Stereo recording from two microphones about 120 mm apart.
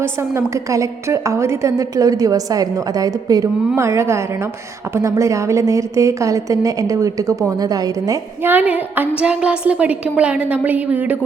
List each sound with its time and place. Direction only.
0.0 s a woman's voice: 20° right (ahead or behind)
8.4 s a woman's voice: 15° right (ahead or behind)